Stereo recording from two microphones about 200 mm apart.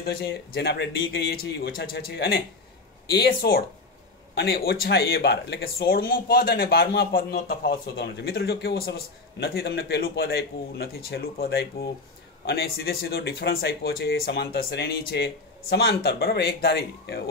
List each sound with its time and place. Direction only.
0.0 s speech: 55° left (ahead or behind)